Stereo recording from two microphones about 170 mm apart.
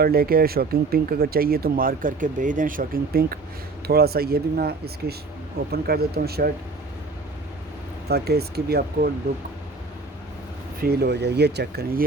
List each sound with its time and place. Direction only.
0.0 s speech: 65° right (ahead or behind)
8.0 s speech: 70° right (ahead or behind)
10.8 s speech: 70° right (ahead or behind)